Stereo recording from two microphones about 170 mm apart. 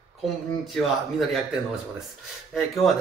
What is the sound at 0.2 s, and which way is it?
Speech, centre (ahead or behind).